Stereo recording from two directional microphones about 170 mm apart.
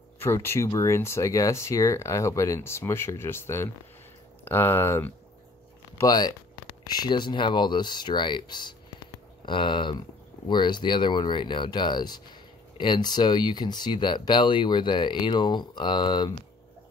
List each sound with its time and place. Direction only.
0.2 s speech: 15° left (ahead or behind)